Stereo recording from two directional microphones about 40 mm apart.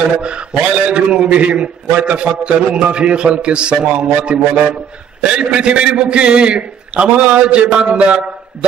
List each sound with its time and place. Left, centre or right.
0.2 s a man's voice: right